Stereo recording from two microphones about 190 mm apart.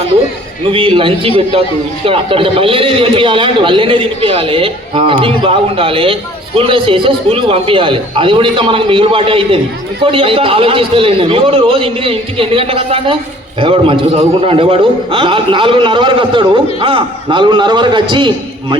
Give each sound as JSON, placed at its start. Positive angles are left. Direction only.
{"t": 0.7, "sound": "a man's voice", "side_deg": -30}